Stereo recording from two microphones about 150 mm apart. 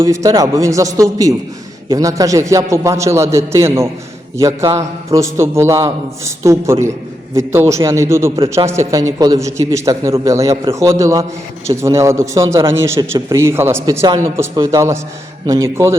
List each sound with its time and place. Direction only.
0.0 s a man's voice: 20° right (ahead or behind)